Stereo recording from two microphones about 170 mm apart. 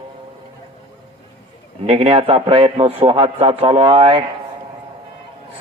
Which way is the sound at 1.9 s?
35° right (ahead or behind).